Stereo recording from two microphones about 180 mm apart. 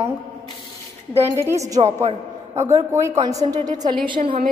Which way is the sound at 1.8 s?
35° right (ahead or behind).